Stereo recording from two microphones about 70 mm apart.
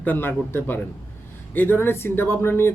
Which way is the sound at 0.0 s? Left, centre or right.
Left.